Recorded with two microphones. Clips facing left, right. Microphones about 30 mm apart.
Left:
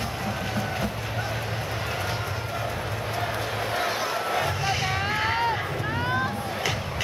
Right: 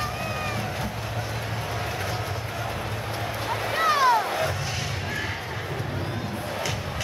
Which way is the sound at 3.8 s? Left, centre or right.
Right.